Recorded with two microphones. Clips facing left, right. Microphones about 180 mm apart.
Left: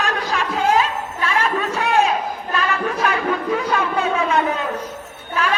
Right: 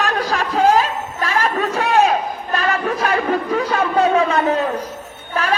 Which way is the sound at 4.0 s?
35° right (ahead or behind).